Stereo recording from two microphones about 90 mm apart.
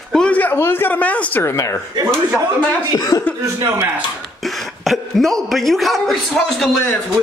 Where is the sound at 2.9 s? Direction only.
45° left (ahead or behind).